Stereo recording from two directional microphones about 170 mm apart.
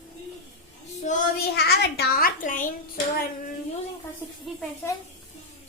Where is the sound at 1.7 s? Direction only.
70° left (ahead or behind); by 2.7 s 50° left (ahead or behind).